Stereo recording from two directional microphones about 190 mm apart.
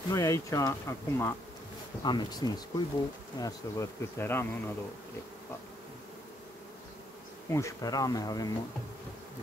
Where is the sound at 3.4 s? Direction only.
15° left (ahead or behind).